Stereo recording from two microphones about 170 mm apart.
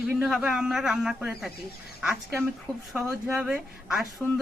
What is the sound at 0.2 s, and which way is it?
A woman's voice, 5° right (ahead or behind).